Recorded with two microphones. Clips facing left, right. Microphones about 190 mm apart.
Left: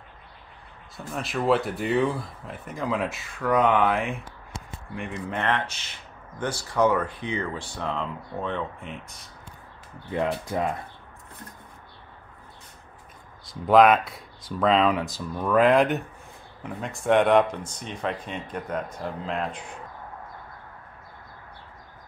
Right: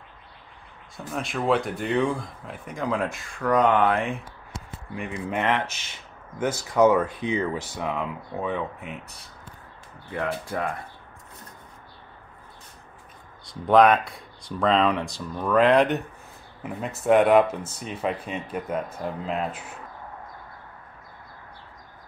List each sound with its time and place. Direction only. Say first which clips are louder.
0.9 s speech: even; centre (ahead or behind)
6.8 s speech: right 4 dB; 10° right (ahead or behind)
10.1 s speech: left 2 dB; 20° left (ahead or behind)
13.5 s speech: even; centre (ahead or behind)